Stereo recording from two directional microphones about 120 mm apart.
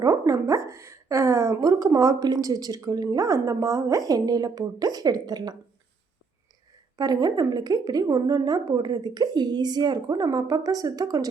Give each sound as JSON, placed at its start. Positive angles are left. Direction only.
{"t": 0.0, "sound": "speech", "side_deg": -30}
{"t": 6.9, "sound": "a woman's voice", "side_deg": -35}